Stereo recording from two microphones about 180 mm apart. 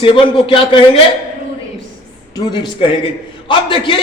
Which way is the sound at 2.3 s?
25° left (ahead or behind).